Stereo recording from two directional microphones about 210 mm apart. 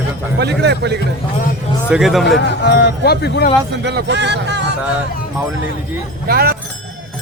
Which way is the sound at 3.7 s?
55° right (ahead or behind).